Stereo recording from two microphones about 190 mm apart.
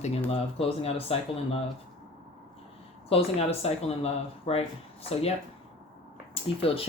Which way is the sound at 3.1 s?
30° left (ahead or behind).